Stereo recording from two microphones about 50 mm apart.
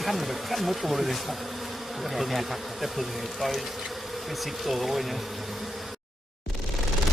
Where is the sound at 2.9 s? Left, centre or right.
Centre.